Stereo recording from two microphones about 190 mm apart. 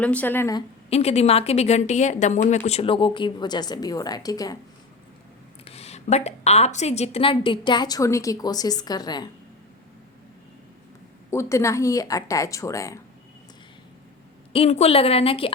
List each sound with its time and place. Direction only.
0.0 s speech: 5° left (ahead or behind)
0.9 s a woman's voice: 35° left (ahead or behind)
5.6 s a woman's voice: 35° left (ahead or behind)
11.3 s speech: 15° left (ahead or behind)
14.5 s speech: 30° left (ahead or behind)